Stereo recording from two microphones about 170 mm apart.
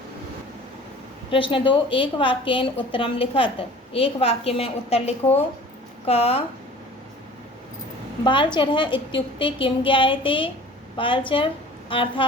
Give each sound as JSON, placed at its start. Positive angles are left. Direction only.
{"t": 1.3, "sound": "a woman's voice", "side_deg": 30}
{"t": 8.2, "sound": "a woman's voice", "side_deg": 30}